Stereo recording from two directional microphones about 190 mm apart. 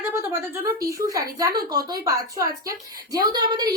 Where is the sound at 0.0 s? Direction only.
10° right (ahead or behind).